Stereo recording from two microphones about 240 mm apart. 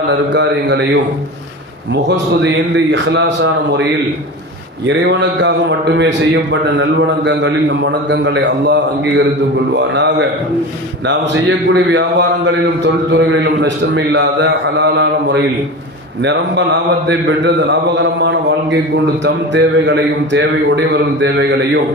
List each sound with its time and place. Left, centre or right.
0.1 s a man's voice: right
1.9 s a man's voice: right
4.9 s a man's voice: right